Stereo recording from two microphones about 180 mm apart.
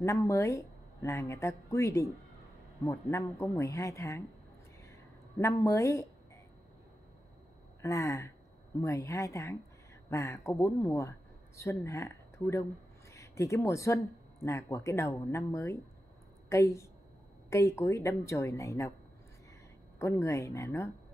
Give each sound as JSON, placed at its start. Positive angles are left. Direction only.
{"t": 0.0, "sound": "a woman's voice", "side_deg": 15}
{"t": 5.4, "sound": "a woman's voice", "side_deg": 15}
{"t": 7.8, "sound": "a woman's voice", "side_deg": 15}
{"t": 20.0, "sound": "a woman's voice", "side_deg": 15}